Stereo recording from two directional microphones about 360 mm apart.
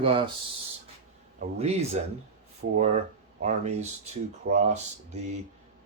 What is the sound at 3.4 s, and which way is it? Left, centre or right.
Speech, centre.